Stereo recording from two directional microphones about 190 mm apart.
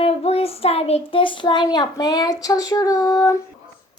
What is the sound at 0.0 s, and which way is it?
Child singing, 30° left (ahead or behind).